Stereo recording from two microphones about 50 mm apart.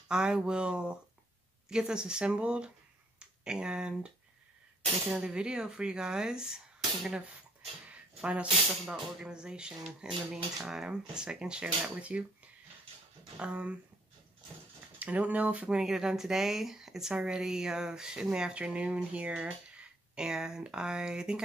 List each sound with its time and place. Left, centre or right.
0.1 s speech: centre
5.1 s speech: centre
7.9 s a sound: right
8.9 s speech: centre
13.4 s speech: right
15.0 s speech: right
15.7 s speech: centre